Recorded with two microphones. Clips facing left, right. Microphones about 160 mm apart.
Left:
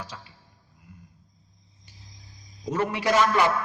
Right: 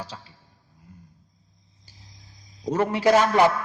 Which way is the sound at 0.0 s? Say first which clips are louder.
Right 2 dB; 30° right (ahead or behind).